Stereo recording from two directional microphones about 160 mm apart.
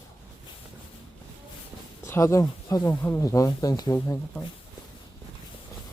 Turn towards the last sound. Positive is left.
turn(degrees=15)  # may be behind; listen again after turning